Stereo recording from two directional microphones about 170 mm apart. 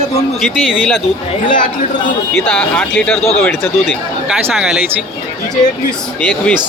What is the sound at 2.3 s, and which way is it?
Speech, 10° left (ahead or behind).